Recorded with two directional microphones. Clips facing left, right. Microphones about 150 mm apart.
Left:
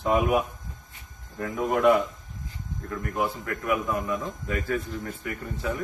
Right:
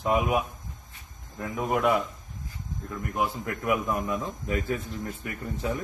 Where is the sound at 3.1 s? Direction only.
20° right (ahead or behind).